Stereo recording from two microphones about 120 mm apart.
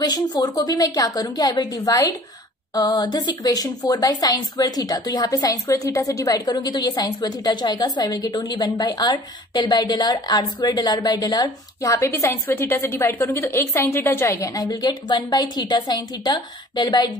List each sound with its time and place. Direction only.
0.0 s a woman's voice: 35° left (ahead or behind)